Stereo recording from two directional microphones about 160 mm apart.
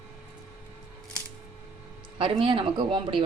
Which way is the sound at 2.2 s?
35° right (ahead or behind).